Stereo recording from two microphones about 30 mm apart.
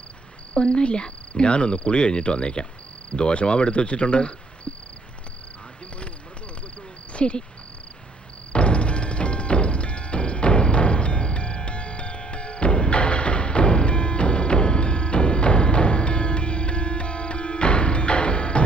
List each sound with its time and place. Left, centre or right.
0.5 s cricket: left
7.1 s speech: left
8.5 s music: left